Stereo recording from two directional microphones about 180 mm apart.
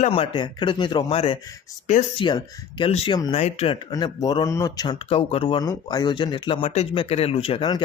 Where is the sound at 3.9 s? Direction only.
20° left (ahead or behind).